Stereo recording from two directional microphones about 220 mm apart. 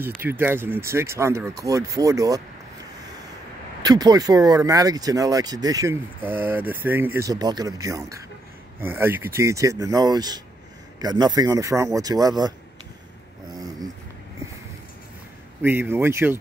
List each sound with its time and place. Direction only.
0.2 s speech: 10° right (ahead or behind)
3.8 s speech: 15° right (ahead or behind)
15.6 s speech: 10° right (ahead or behind)